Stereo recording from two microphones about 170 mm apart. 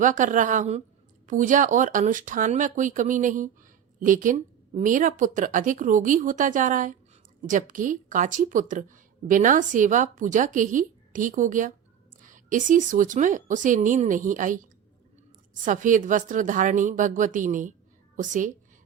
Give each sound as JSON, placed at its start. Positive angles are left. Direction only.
{"t": 0.0, "sound": "a woman's voice", "side_deg": -50}